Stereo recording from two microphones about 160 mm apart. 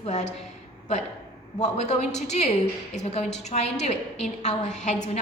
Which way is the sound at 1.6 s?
45° left (ahead or behind).